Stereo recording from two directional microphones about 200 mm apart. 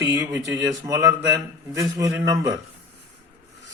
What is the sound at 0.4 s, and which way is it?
Speech, 15° right (ahead or behind).